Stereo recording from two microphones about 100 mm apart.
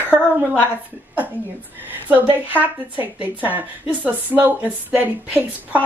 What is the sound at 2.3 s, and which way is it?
Speech, 15° right (ahead or behind).